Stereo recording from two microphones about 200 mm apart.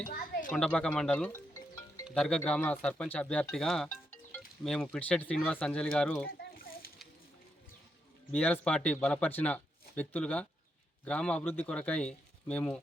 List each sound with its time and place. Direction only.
0.5 s speech: 5° left (ahead or behind)
6.4 s children playing: 50° left (ahead or behind)
8.3 s speech: 5° left (ahead or behind)